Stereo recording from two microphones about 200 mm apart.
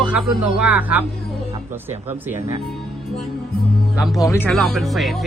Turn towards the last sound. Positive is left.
turn(degrees=0)  # may be behind; listen again after turning